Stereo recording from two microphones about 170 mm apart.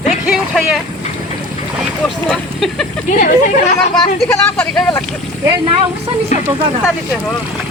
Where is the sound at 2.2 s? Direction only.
5° left (ahead or behind).